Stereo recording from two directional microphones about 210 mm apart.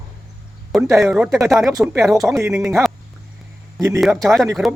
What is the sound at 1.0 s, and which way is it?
Speech, 5° right (ahead or behind).